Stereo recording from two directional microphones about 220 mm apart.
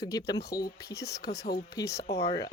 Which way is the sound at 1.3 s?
45° left (ahead or behind).